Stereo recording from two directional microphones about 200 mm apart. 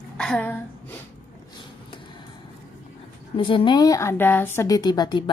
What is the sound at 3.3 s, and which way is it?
Speech, 25° left (ahead or behind).